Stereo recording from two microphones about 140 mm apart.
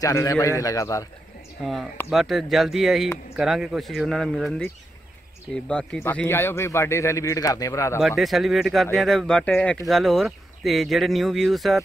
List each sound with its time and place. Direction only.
0.0 s a man's voice: 25° left (ahead or behind)
1.6 s a man's voice: centre (ahead or behind); by 8.0 s 20° left (ahead or behind)
8.2 s speech: centre (ahead or behind)